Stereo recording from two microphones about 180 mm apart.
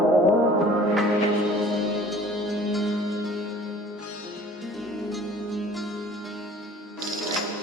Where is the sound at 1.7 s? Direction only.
Centre (ahead or behind).